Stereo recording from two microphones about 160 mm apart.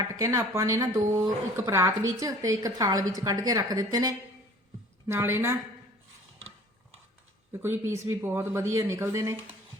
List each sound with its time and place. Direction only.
0.0 s speech: 20° right (ahead or behind)
7.6 s speech: 15° right (ahead or behind)